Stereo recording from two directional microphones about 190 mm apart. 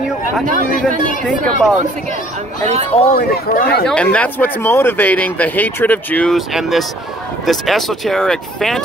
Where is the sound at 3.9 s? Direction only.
5° left (ahead or behind).